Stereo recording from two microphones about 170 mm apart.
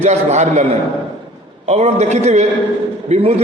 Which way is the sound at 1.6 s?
40° right (ahead or behind).